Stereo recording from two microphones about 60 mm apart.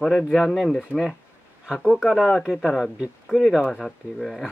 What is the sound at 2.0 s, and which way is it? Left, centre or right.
Speech, centre.